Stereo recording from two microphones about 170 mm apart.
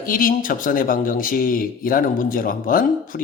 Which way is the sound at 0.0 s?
55° left (ahead or behind).